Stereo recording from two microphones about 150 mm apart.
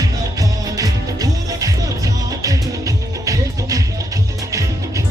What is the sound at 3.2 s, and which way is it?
Music, 20° right (ahead or behind).